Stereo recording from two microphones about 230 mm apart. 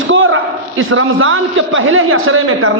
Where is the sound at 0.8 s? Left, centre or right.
Right.